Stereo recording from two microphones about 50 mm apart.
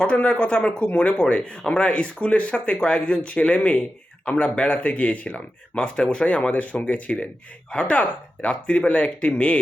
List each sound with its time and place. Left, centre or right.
0.0 s speech: left